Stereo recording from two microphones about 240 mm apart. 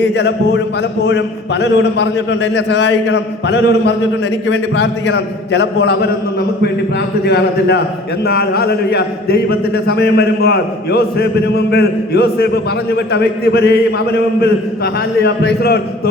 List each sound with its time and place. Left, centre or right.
0.0 s a man's voice: left
7.3 s a man's voice: left
15.2 s a man's voice: left